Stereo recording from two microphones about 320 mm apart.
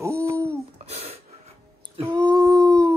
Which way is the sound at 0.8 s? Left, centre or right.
Centre.